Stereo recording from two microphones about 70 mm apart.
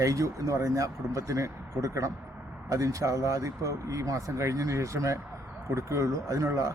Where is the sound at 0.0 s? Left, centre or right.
Right.